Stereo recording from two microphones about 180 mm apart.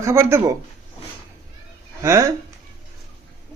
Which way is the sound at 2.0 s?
15° right (ahead or behind).